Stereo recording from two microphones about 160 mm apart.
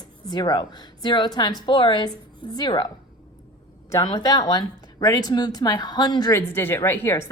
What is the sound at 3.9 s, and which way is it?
Speech, 25° left (ahead or behind).